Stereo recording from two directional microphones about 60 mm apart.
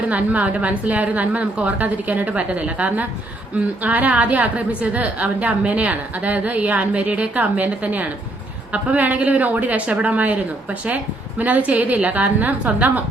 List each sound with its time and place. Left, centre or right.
0.1 s a woman's voice: right